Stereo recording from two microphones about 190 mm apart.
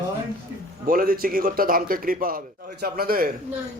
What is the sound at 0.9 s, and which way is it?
A man's voice, 50° right (ahead or behind).